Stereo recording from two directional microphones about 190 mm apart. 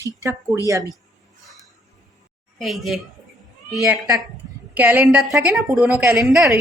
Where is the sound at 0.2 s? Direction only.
15° right (ahead or behind).